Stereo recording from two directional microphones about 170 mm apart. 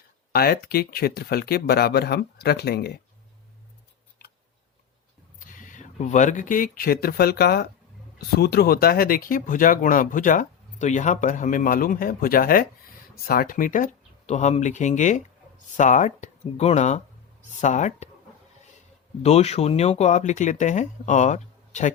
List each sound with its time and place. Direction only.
0.3 s speech: 65° left (ahead or behind)
4.2 s tick: 65° left (ahead or behind)
5.5 s speech: 50° left (ahead or behind)
19.2 s speech: 40° left (ahead or behind)